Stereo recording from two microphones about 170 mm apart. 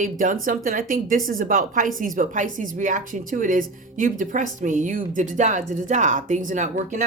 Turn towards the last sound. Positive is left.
turn(degrees=-50)  # may be behind; listen again after turning